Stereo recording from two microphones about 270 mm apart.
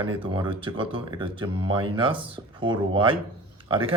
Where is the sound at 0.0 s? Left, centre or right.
Centre.